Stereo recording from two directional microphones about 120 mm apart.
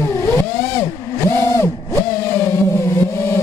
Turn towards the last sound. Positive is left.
turn(degrees=20)  # may be behind; listen again after turning